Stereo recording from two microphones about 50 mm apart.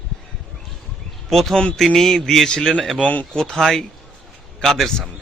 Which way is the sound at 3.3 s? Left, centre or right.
Centre.